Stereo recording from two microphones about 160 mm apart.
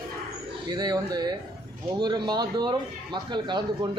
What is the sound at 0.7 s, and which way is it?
Speech, 25° right (ahead or behind).